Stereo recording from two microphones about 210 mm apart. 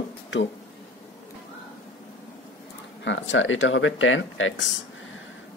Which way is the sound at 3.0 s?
60° left (ahead or behind).